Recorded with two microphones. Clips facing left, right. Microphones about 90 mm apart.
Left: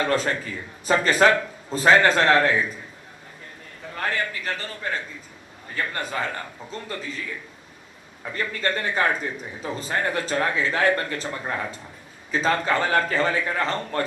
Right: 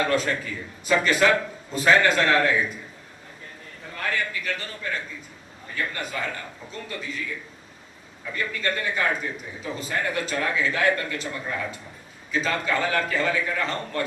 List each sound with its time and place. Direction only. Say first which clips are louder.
0.0 s a man's voice: left 1 dB; 35° left (ahead or behind)
4.1 s a man's voice: right 2 dB; 35° left (ahead or behind)
8.2 s a man's voice: left 2 dB; 35° left (ahead or behind)